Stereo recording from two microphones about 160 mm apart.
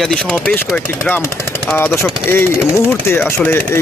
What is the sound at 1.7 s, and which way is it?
Speech, 15° left (ahead or behind).